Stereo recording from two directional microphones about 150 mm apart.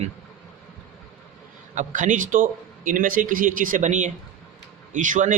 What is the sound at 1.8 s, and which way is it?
A man's voice, 60° right (ahead or behind).